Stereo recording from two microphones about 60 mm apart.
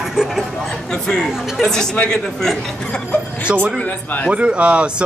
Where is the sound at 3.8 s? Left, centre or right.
Left.